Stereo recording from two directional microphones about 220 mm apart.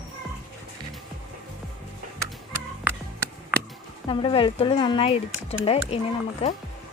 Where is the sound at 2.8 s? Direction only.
10° right (ahead or behind).